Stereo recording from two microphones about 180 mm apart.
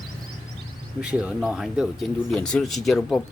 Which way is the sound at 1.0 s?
5° right (ahead or behind).